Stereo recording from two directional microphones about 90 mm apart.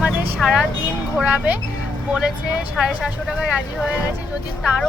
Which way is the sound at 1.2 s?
15° right (ahead or behind).